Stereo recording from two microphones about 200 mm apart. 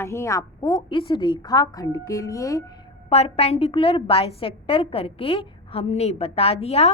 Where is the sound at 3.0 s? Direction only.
30° left (ahead or behind).